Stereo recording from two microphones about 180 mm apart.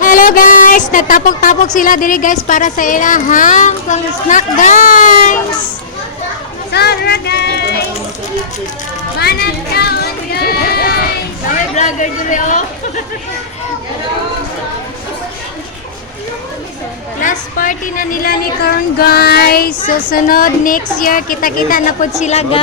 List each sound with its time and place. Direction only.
0.0 s music: 50° left (ahead or behind)
1.7 s speech: 50° left (ahead or behind)
6.7 s speech: 65° left (ahead or behind)
9.1 s a sound: 60° left (ahead or behind)
11.4 s speech: 45° left (ahead or behind)
17.2 s speech: 45° left (ahead or behind)
22.2 s a woman's voice: 35° left (ahead or behind)